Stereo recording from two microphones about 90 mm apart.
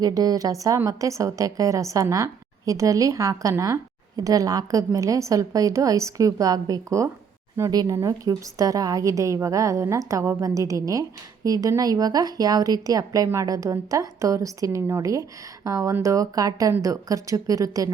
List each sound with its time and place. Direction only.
0.0 s a woman's voice: 45° right (ahead or behind)